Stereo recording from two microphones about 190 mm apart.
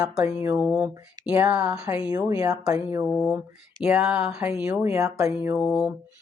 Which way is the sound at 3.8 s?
5° right (ahead or behind).